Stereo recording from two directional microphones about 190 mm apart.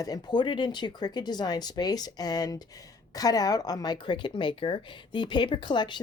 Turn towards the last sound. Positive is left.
turn(degrees=25)  # may be behind; listen again after turning